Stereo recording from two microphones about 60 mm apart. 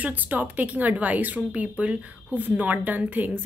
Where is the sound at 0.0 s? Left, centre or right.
Right.